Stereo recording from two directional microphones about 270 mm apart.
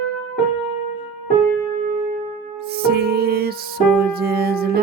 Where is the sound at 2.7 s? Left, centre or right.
Right.